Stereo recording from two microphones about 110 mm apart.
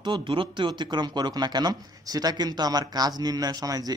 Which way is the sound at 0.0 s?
45° right (ahead or behind).